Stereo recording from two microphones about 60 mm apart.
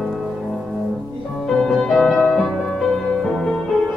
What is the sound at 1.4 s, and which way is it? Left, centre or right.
Music, centre.